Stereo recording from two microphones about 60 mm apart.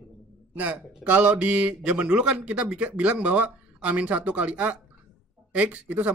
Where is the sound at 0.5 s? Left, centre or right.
Right.